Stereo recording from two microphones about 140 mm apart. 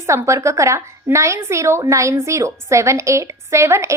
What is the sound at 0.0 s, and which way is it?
A woman's voice, 20° right (ahead or behind).